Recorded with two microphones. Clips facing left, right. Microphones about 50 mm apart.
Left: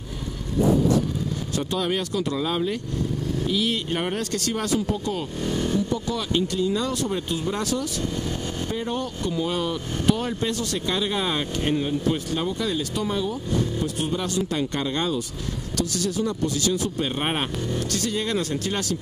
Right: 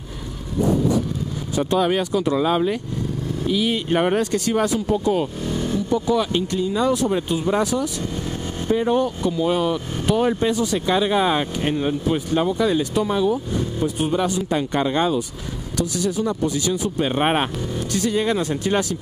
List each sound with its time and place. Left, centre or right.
1.5 s speech: centre